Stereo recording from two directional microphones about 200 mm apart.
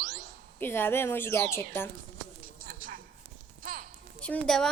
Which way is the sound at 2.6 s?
45° right (ahead or behind).